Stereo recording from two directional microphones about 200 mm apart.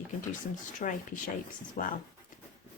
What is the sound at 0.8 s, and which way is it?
A woman's voice, 40° left (ahead or behind).